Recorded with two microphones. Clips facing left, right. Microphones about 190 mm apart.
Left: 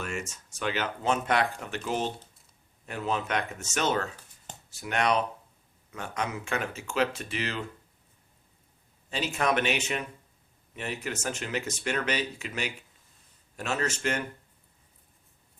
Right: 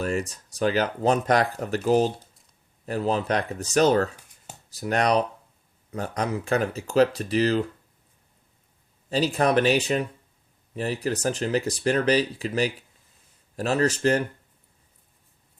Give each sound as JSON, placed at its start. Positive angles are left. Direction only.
{"t": 0.0, "sound": "speech", "side_deg": -35}
{"t": 9.0, "sound": "speech", "side_deg": -35}